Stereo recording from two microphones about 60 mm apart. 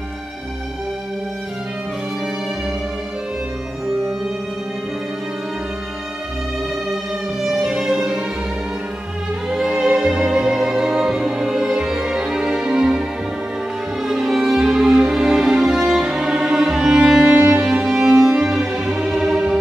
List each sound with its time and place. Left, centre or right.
7.4 s music: centre
9.5 s music: centre
14.0 s music: centre
17.4 s music: right
17.8 s music: centre